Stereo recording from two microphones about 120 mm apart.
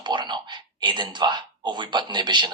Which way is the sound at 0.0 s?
40° right (ahead or behind).